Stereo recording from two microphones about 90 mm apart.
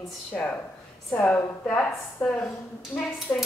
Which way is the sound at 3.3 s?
25° left (ahead or behind).